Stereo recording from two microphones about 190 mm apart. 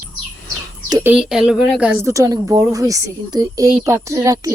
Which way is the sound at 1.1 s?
5° right (ahead or behind).